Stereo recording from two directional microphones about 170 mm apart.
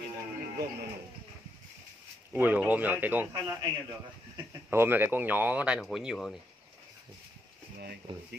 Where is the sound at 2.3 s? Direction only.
10° right (ahead or behind).